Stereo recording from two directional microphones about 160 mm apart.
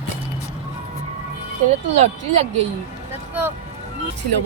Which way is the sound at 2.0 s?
45° right (ahead or behind).